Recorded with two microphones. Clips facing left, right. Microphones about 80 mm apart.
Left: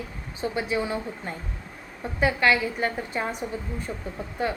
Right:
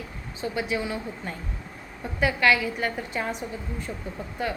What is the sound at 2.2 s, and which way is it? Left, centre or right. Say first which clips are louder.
A woman's voice: even; left.